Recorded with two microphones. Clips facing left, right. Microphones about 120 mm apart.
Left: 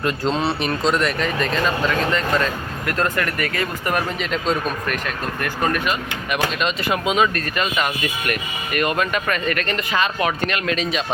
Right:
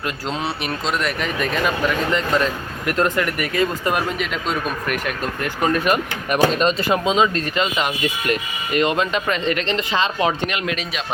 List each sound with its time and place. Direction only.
0.0 s speech: 5° right (ahead or behind)
4.2 s speech: 5° right (ahead or behind)
5.4 s speech: 20° right (ahead or behind)
5.8 s speech: 45° right (ahead or behind); by 10.8 s 15° right (ahead or behind)